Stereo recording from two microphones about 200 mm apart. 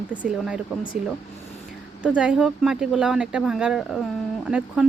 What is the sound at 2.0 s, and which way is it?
Speech, 5° right (ahead or behind).